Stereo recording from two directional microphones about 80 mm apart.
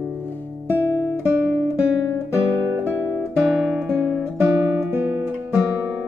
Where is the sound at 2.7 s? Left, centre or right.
Right.